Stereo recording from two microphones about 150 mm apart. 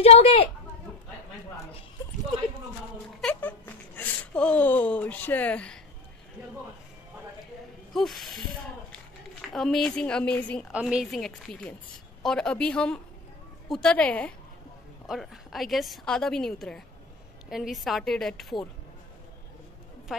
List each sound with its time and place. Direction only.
0.0 s speech: 40° left (ahead or behind)
3.2 s a sound: 10° left (ahead or behind)
7.9 s a woman's voice: centre (ahead or behind)
9.5 s a woman's voice: 5° left (ahead or behind)
10.7 s a woman's voice: 5° right (ahead or behind)